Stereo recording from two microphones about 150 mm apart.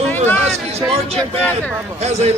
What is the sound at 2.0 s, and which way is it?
Speech, 45° right (ahead or behind).